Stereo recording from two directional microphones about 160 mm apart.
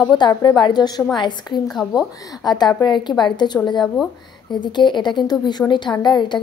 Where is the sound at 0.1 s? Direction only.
30° left (ahead or behind).